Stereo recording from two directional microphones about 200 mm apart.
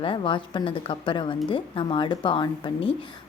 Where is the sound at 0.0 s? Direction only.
25° left (ahead or behind).